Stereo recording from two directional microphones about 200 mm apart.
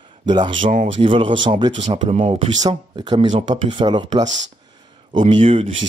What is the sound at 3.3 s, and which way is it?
Speech, 35° right (ahead or behind).